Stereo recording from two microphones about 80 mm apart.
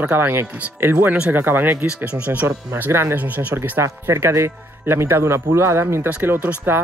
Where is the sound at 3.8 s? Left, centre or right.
Right.